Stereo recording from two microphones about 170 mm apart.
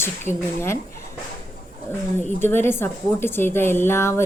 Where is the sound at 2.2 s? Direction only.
10° left (ahead or behind).